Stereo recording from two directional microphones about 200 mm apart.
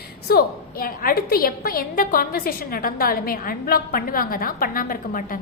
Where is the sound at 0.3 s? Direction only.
50° left (ahead or behind).